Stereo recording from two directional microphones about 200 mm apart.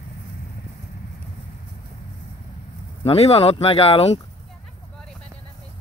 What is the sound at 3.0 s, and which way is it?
Speech, 30° left (ahead or behind).